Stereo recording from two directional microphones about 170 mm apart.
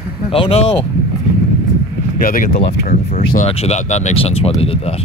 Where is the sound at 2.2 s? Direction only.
55° left (ahead or behind).